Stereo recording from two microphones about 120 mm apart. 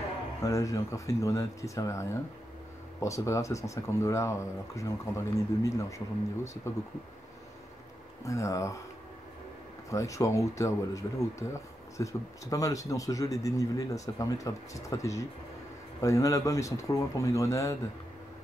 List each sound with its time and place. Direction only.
0.4 s speech: 25° left (ahead or behind)
8.2 s speech: 25° left (ahead or behind)
9.8 s speech: 25° left (ahead or behind)